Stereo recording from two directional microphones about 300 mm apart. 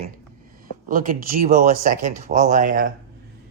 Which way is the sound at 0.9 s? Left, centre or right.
Right.